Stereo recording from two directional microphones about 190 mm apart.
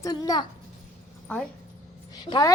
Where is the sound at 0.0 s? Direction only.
20° left (ahead or behind).